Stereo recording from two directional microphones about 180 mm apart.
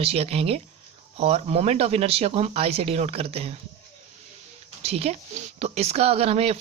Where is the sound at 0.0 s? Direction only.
35° right (ahead or behind).